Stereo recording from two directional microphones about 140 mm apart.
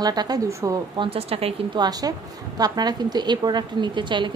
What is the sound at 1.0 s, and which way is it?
Speech, 45° right (ahead or behind).